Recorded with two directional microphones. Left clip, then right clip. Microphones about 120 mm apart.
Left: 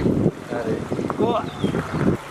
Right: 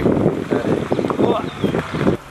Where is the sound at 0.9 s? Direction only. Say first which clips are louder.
Right 3 dB; 20° right (ahead or behind).